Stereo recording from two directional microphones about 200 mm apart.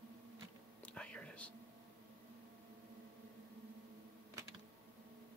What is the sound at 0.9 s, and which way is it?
Whispering, 5° left (ahead or behind).